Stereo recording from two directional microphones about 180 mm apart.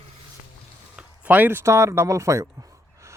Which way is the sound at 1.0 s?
10° right (ahead or behind).